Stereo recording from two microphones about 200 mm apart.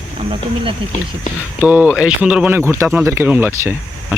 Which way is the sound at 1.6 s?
10° right (ahead or behind).